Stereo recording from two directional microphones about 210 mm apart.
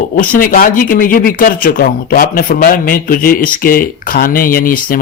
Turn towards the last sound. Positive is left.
turn(degrees=45)  # may be behind; listen again after turning